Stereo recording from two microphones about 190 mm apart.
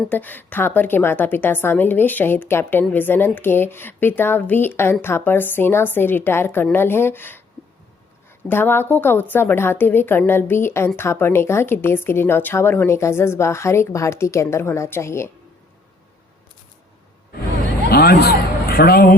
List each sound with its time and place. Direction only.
0.1 s a woman's voice: 10° left (ahead or behind)
8.4 s a woman's voice: 10° left (ahead or behind)
17.9 s a man's voice: 55° left (ahead or behind)